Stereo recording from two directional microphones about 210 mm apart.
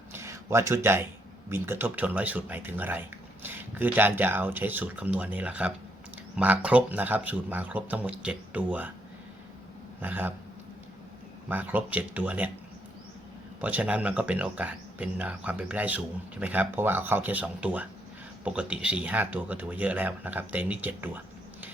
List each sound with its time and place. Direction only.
0.1 s a sound: 10° right (ahead or behind)
1.5 s speech: 10° right (ahead or behind)
10.0 s speech: 10° right (ahead or behind)
11.4 s speech: 10° right (ahead or behind)
13.6 s speech: 5° right (ahead or behind)